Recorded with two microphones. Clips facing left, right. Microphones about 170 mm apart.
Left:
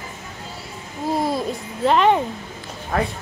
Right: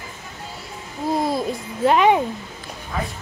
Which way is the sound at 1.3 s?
10° right (ahead or behind).